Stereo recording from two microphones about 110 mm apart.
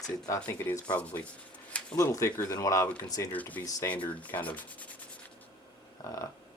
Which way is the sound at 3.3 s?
15° left (ahead or behind).